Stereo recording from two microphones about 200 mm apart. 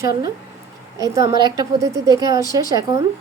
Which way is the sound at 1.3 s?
20° right (ahead or behind).